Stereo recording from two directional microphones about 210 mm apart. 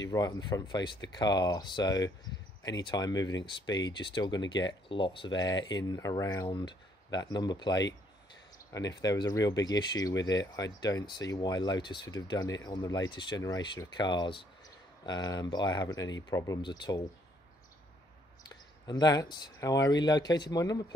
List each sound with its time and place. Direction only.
0.1 s speech: 20° left (ahead or behind)
9.0 s speech: 15° left (ahead or behind)
18.5 s speech: 20° left (ahead or behind)